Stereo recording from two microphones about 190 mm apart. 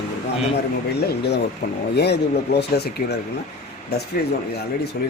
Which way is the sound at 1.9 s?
60° left (ahead or behind).